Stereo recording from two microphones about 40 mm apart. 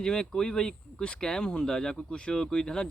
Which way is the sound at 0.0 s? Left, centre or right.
Centre.